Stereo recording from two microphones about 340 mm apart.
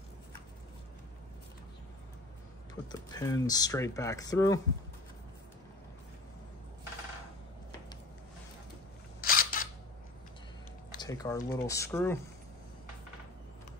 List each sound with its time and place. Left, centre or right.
2.7 s speech: centre
9.2 s single-lens reflex camera: left
11.0 s speech: centre